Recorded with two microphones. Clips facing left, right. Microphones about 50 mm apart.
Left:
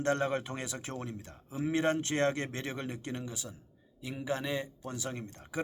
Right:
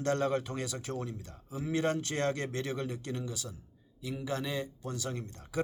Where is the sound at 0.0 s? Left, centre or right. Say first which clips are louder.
Even; left.